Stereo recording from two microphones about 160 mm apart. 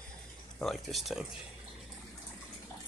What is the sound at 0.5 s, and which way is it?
Speech, centre (ahead or behind).